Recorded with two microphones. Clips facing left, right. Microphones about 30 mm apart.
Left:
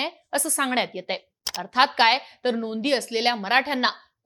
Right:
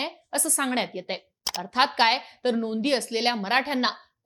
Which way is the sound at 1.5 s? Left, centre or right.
Centre.